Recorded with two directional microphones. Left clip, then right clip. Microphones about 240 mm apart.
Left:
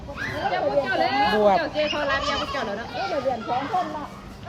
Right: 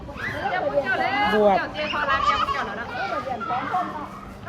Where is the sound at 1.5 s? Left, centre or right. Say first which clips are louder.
Left 1 dB; left.